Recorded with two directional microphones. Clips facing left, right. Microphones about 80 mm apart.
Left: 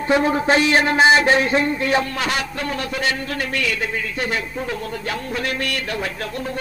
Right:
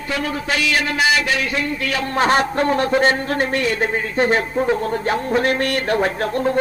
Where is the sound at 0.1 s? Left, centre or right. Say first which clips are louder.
Left 6 dB; left.